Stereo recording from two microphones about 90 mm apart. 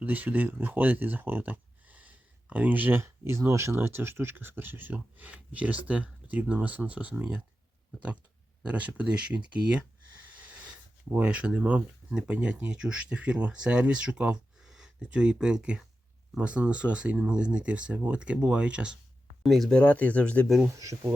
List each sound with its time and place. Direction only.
0.0 s speech: 20° right (ahead or behind)
8.6 s speech: 15° right (ahead or behind)
11.1 s speech: 15° right (ahead or behind)
19.4 s speech: centre (ahead or behind)
19.7 s speech: 15° left (ahead or behind)
20.7 s speech: 35° right (ahead or behind)